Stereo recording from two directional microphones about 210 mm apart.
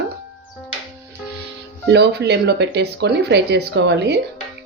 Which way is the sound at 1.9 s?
55° right (ahead or behind).